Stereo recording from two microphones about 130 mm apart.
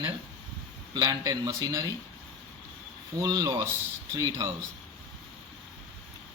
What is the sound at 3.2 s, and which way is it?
Speech, 30° right (ahead or behind).